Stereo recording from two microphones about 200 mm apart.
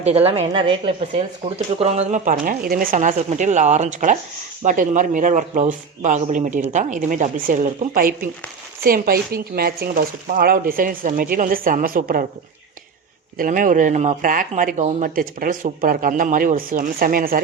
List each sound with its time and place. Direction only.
0.0 s speech: 30° right (ahead or behind)
13.3 s speech: 45° right (ahead or behind)